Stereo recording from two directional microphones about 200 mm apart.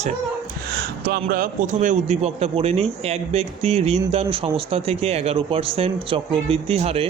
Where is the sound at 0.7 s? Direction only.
55° right (ahead or behind).